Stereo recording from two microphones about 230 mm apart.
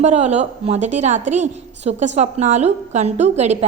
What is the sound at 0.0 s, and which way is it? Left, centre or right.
A woman's voice, right.